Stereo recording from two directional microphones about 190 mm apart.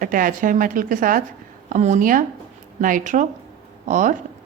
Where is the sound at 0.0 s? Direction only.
45° right (ahead or behind).